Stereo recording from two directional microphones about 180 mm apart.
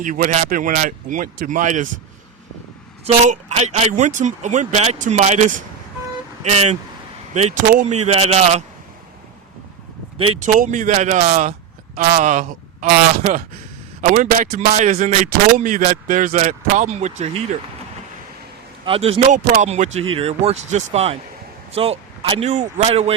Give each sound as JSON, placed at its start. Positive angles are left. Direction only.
{"t": 0.0, "sound": "speech", "side_deg": -45}
{"t": 3.0, "sound": "a man's voice", "side_deg": -35}
{"t": 10.2, "sound": "a man's voice", "side_deg": -30}
{"t": 10.6, "sound": "a man's voice", "side_deg": -45}
{"t": 18.9, "sound": "a man's voice", "side_deg": -30}